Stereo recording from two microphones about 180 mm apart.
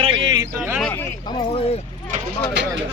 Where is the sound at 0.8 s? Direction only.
10° left (ahead or behind).